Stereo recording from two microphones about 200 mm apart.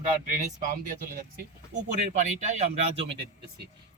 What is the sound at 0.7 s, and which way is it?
Speech, 45° right (ahead or behind).